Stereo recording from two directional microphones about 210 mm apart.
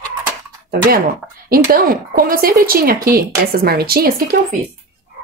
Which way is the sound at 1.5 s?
45° right (ahead or behind).